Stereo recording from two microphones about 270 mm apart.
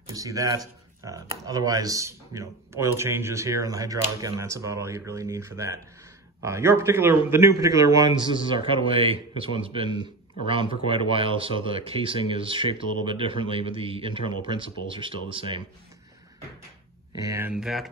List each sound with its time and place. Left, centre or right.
0.1 s a man's voice: centre
17.2 s speech: centre